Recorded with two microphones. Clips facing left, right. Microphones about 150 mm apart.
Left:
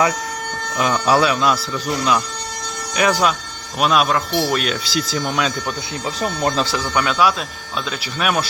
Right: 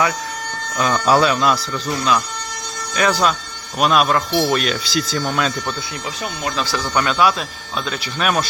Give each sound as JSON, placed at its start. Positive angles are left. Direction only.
{"t": 0.8, "sound": "speech", "side_deg": 10}
{"t": 1.9, "sound": "speech", "side_deg": 20}
{"t": 3.8, "sound": "speech", "side_deg": 0}
{"t": 6.1, "sound": "speech", "side_deg": 35}
{"t": 6.7, "sound": "speech", "side_deg": 10}